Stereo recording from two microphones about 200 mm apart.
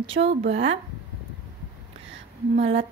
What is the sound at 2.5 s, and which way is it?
Speech, 30° right (ahead or behind).